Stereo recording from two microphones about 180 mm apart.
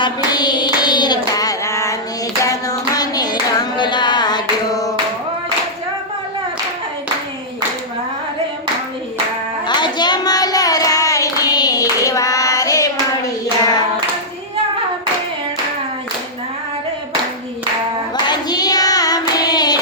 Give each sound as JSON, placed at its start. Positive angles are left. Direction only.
{"t": 0.0, "sound": "hands", "side_deg": 25}
{"t": 3.6, "sound": "a sound", "side_deg": 25}
{"t": 9.6, "sound": "clapping", "side_deg": 25}
{"t": 12.0, "sound": "hands", "side_deg": 20}
{"t": 18.3, "sound": "hands", "side_deg": 20}